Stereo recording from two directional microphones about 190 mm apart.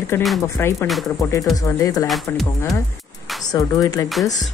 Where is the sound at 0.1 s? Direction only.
10° left (ahead or behind).